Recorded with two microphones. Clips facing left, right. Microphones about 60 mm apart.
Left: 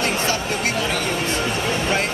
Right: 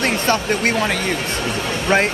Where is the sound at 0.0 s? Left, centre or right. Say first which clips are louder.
Right 3 dB; right.